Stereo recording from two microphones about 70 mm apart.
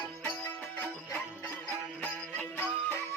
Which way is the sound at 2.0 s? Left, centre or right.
Left.